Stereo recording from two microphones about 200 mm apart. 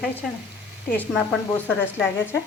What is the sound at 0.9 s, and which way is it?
Speech, 5° left (ahead or behind).